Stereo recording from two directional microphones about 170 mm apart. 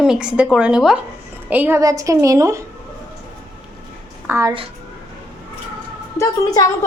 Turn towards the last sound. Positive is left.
turn(degrees=15)  # may be behind; listen again after turning